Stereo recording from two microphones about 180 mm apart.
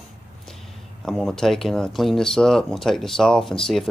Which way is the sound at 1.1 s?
Centre (ahead or behind).